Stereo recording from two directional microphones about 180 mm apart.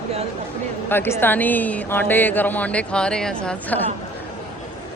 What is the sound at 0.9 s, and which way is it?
Speech, 10° left (ahead or behind).